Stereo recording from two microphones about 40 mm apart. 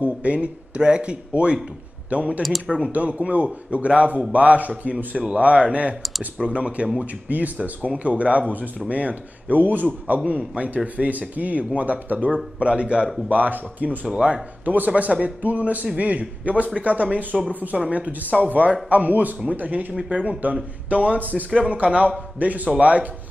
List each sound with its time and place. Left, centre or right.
0.0 s speech: right
7.2 s speech: right
10.2 s speech: right
12.5 s speech: right
13.3 s speech: right
14.1 s speech: right
14.6 s speech: right
17.7 s speech: right